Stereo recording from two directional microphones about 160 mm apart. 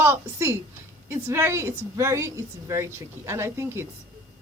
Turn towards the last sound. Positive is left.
turn(degrees=-15)  # may be behind; listen again after turning